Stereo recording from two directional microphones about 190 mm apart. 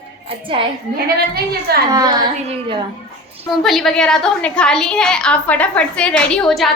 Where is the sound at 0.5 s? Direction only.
25° right (ahead or behind).